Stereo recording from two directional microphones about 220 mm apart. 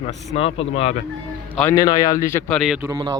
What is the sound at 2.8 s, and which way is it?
Speech, 15° right (ahead or behind).